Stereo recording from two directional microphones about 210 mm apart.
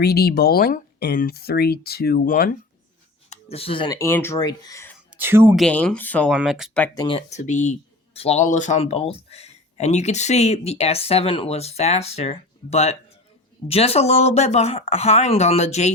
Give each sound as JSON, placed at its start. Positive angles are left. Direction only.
{"t": 0.0, "sound": "speech", "side_deg": 50}
{"t": 3.2, "sound": "speech", "side_deg": 25}
{"t": 5.1, "sound": "speech", "side_deg": -10}
{"t": 5.5, "sound": "speech", "side_deg": 5}
{"t": 6.3, "sound": "speech", "side_deg": -5}
{"t": 6.8, "sound": "speech", "side_deg": 20}
{"t": 7.3, "sound": "speech", "side_deg": 35}